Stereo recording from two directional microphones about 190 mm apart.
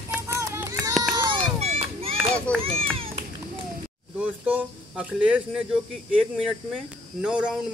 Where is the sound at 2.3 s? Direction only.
5° left (ahead or behind).